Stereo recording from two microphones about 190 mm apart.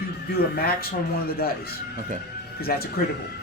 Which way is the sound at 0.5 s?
55° left (ahead or behind).